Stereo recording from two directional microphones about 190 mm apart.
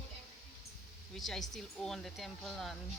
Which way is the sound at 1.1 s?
Centre (ahead or behind).